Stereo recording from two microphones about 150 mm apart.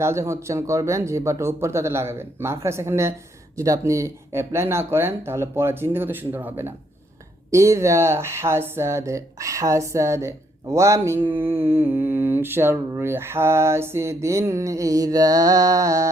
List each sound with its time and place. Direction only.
0.0 s speech: 20° right (ahead or behind)
13.0 s mantra: 15° right (ahead or behind)